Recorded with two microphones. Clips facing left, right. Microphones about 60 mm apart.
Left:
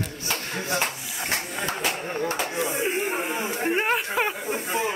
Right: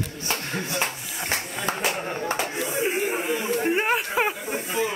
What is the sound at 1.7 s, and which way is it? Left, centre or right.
Speech, right.